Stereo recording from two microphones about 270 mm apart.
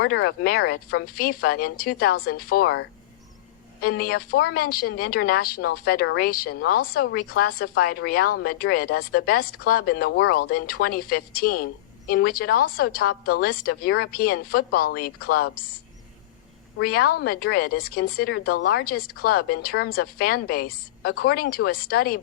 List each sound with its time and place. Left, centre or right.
0.0 s a woman's voice: left
16.7 s a woman's voice: left